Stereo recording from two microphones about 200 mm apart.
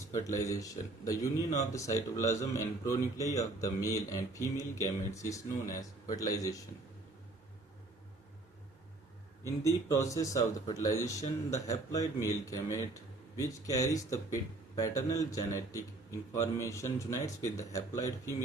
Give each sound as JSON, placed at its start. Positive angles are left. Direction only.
{"t": 0.1, "sound": "speech", "side_deg": 15}
{"t": 5.6, "sound": "a man's voice", "side_deg": 40}
{"t": 6.1, "sound": "speech", "side_deg": 15}
{"t": 9.4, "sound": "speech", "side_deg": 15}